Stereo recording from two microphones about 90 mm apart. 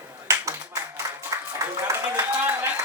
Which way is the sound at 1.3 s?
35° right (ahead or behind).